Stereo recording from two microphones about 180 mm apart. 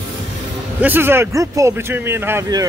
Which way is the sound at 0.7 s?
10° right (ahead or behind).